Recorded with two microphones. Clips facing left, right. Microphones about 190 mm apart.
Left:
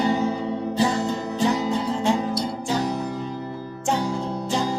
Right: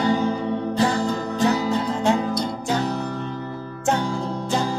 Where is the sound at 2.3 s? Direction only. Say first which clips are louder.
Right 1 dB; 10° left (ahead or behind).